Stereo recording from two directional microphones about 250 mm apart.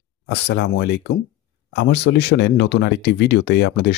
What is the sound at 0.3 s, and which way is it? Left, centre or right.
Speech, left.